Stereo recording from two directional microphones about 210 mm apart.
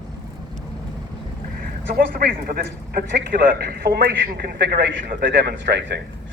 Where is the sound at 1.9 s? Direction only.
45° right (ahead or behind).